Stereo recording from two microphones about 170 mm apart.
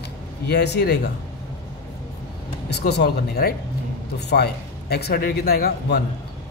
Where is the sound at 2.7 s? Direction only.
75° left (ahead or behind).